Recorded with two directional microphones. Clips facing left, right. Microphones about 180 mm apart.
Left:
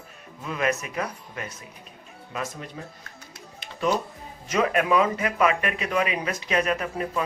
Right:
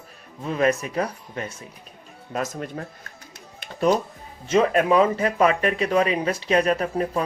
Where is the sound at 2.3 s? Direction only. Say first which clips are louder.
Right 5 dB; 45° right (ahead or behind).